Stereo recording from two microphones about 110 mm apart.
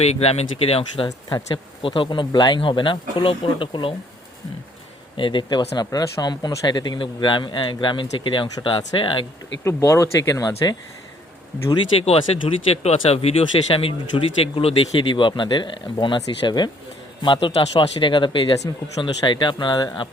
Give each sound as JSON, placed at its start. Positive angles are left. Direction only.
{"t": 0.0, "sound": "speech", "side_deg": 70}
{"t": 5.1, "sound": "speech", "side_deg": 50}
{"t": 9.6, "sound": "speech", "side_deg": 25}
{"t": 12.0, "sound": "speech", "side_deg": 65}